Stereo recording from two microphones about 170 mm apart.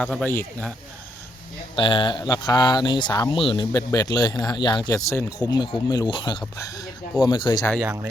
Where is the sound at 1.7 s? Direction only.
30° left (ahead or behind).